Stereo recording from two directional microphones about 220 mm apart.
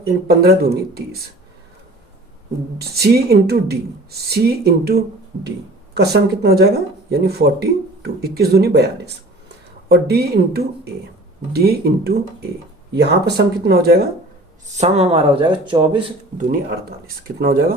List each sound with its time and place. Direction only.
0.0 s speech: 45° right (ahead or behind)
2.7 s speech: 45° right (ahead or behind)
14.7 s speech: 30° right (ahead or behind)
16.4 s speech: 40° right (ahead or behind)